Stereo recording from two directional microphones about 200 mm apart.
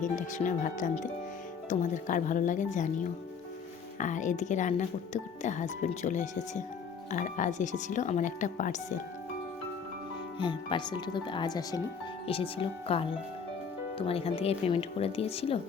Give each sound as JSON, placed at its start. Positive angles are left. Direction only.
{"t": 0.0, "sound": "speech", "side_deg": 40}
{"t": 10.3, "sound": "speech", "side_deg": 25}